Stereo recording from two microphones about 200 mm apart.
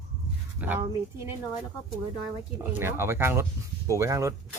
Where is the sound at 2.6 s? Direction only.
10° right (ahead or behind).